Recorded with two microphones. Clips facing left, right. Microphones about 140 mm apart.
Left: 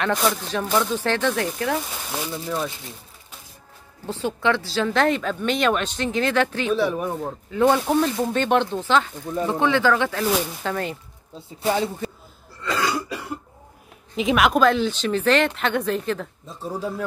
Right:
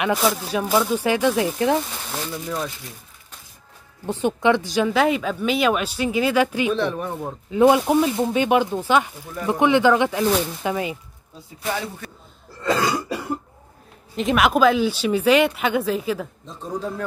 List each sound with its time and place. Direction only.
0.0 s speech: 5° right (ahead or behind)
1.8 s a man's voice: centre (ahead or behind)
4.0 s speech: 20° right (ahead or behind)
6.7 s a man's voice: 5° left (ahead or behind)
7.5 s speech: 15° right (ahead or behind)
10.2 s a man's voice: 5° left (ahead or behind)
10.6 s speech: 10° right (ahead or behind)
11.6 s speech: 25° left (ahead or behind)
14.1 s speech: centre (ahead or behind)
16.4 s a man's voice: 5° left (ahead or behind)